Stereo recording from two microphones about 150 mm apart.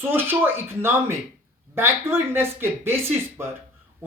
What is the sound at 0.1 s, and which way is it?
A woman's voice, 15° right (ahead or behind).